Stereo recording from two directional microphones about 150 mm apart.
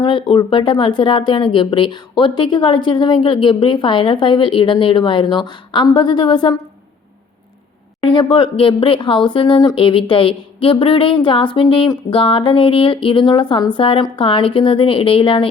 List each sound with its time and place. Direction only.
0.0 s speech: 30° left (ahead or behind)
8.0 s speech: 35° left (ahead or behind)